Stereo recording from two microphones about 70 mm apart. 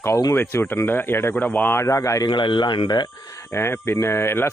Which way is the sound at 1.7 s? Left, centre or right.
Left.